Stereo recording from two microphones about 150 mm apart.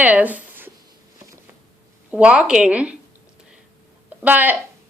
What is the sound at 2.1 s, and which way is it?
Speech, 10° right (ahead or behind).